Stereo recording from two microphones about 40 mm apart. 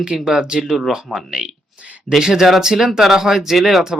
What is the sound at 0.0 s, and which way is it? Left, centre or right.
Speech, centre.